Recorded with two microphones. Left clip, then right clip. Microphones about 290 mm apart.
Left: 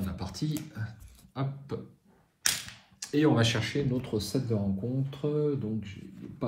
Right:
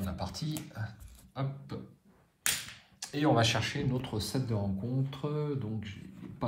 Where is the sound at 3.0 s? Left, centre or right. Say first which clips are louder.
Left 2 dB; centre.